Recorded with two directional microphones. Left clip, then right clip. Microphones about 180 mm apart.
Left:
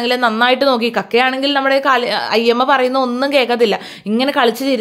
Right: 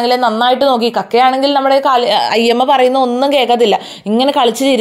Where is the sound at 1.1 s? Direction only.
35° left (ahead or behind).